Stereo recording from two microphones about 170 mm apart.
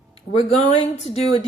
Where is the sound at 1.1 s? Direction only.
40° left (ahead or behind).